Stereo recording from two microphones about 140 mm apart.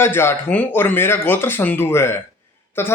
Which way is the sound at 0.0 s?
15° left (ahead or behind).